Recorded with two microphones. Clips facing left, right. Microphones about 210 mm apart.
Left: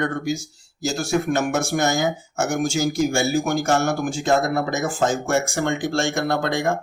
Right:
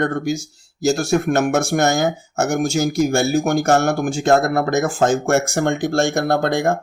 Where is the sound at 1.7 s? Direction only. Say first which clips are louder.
Right 4 dB; 65° right (ahead or behind).